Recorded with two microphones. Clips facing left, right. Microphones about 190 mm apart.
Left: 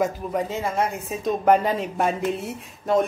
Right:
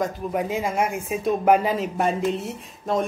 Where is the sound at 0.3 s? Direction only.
10° right (ahead or behind).